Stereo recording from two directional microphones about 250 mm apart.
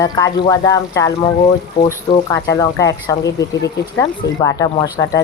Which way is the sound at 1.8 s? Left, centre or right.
Left.